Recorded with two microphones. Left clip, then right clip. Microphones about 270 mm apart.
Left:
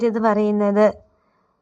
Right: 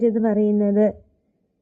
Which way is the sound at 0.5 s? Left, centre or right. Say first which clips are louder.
Left 3 dB; left.